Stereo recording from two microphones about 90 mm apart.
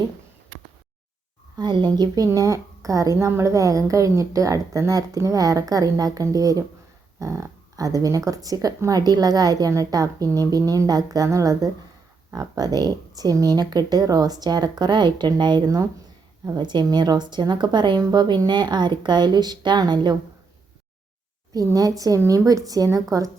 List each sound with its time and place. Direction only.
1.5 s a woman's voice: 55° right (ahead or behind)
16.6 s speech: 55° right (ahead or behind)
21.5 s a woman's voice: 40° right (ahead or behind)